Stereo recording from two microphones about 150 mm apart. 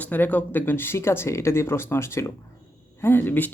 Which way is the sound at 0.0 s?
10° left (ahead or behind).